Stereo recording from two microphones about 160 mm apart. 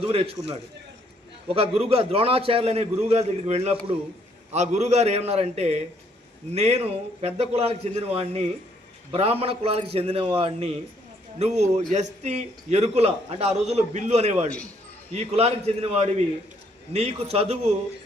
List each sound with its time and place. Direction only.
0.0 s a man's voice: 35° right (ahead or behind)
1.5 s a man's voice: 40° right (ahead or behind)